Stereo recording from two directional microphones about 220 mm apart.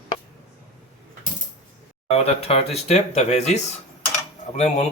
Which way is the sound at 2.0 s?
30° left (ahead or behind).